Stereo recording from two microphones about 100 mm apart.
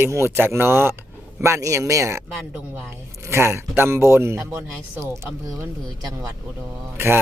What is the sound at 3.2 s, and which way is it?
Speech, 25° right (ahead or behind).